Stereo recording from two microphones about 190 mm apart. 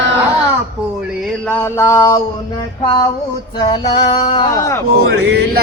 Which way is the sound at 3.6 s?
25° left (ahead or behind).